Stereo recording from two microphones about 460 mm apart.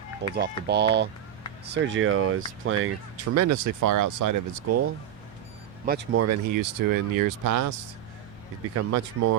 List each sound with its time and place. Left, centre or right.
0.3 s speech: right
5.8 s speech: centre
6.1 s speech: right